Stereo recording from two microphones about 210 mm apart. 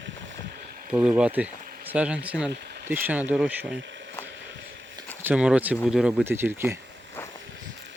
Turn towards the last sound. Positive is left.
turn(degrees=10)  # may be behind; listen again after turning